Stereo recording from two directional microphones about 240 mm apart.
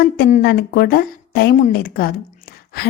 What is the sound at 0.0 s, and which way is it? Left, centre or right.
A woman's voice, left.